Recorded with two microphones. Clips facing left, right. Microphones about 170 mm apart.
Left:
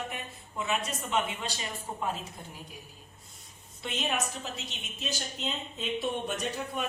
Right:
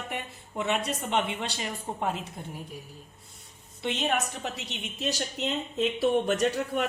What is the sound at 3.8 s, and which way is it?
A woman's voice, 65° right (ahead or behind).